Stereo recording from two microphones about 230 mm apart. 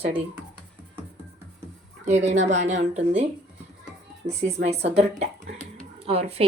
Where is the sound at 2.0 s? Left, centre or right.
Right.